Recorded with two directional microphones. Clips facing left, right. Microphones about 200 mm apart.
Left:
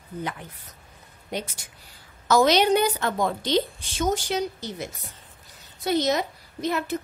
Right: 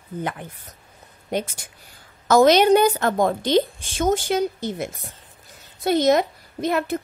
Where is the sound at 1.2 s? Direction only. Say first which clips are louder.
Right 6 dB; 50° right (ahead or behind).